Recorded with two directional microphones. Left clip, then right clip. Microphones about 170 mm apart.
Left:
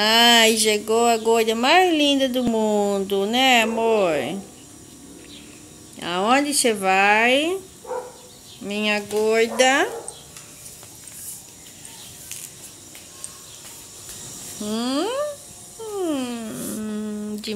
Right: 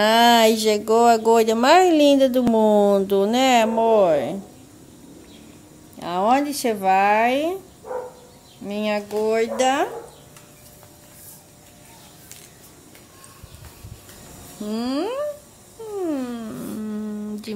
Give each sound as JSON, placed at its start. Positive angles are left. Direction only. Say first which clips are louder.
{"t": 0.0, "sound": "speech", "louder": "even", "side_deg": -40}
{"t": 5.9, "sound": "speech", "louder": "even", "side_deg": -5}
{"t": 8.6, "sound": "speech", "louder": "left 1 dB", "side_deg": -5}
{"t": 14.7, "sound": "speech", "louder": "left 1 dB", "side_deg": 0}
{"t": 16.0, "sound": "a sound", "louder": "left 1 dB", "side_deg": 0}